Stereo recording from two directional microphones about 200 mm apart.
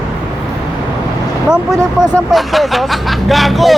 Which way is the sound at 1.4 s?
5° right (ahead or behind).